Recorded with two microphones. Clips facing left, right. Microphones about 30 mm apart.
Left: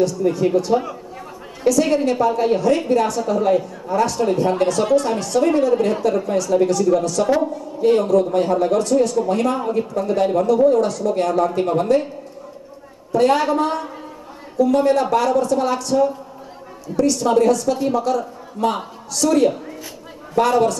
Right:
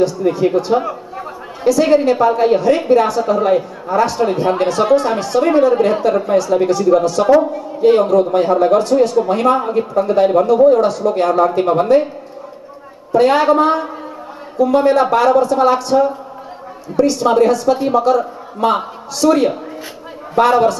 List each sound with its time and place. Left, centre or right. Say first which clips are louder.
0.0 s a man's voice: right 3 dB; right
13.1 s a man's voice: right 5 dB; right